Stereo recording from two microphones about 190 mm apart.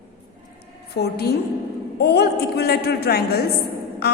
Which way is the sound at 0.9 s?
60° left (ahead or behind).